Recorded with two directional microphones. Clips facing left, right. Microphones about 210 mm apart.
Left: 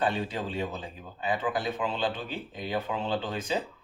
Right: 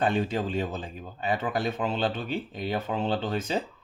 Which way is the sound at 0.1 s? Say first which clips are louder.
Right 5 dB; 45° right (ahead or behind).